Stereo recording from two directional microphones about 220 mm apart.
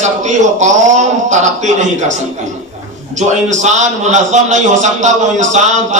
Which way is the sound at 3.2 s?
30° right (ahead or behind).